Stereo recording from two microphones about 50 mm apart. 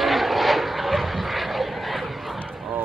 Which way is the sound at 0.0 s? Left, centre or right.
Centre.